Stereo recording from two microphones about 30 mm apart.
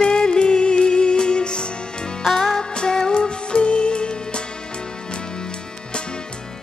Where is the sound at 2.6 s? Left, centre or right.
Left.